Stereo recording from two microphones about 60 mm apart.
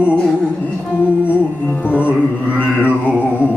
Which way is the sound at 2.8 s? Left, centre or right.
Left.